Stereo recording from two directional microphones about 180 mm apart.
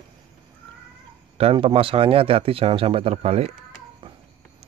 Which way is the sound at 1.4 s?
30° right (ahead or behind).